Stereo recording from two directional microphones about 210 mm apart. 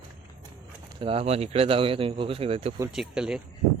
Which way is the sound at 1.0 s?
25° right (ahead or behind).